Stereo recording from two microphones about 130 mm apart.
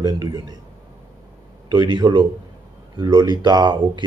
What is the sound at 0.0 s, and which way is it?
Speech, 30° right (ahead or behind).